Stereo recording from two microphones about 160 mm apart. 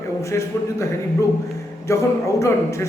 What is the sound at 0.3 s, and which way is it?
Speech, 20° left (ahead or behind).